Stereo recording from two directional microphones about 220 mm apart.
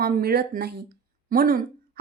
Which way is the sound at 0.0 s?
45° right (ahead or behind).